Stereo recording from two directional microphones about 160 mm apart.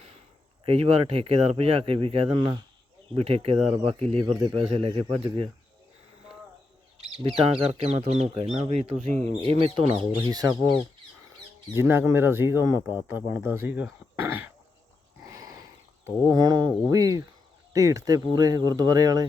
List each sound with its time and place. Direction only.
0.6 s speech: 35° right (ahead or behind)
7.2 s speech: 35° right (ahead or behind); by 13.8 s 10° right (ahead or behind)
15.3 s a sound: 20° right (ahead or behind)
16.2 s speech: 25° right (ahead or behind)